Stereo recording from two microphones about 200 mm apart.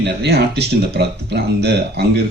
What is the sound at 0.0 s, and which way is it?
Speech, 55° right (ahead or behind).